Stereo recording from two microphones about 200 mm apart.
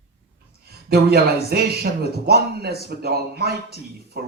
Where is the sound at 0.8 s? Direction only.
50° right (ahead or behind).